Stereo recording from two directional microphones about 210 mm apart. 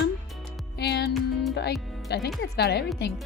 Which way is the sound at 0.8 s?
50° left (ahead or behind).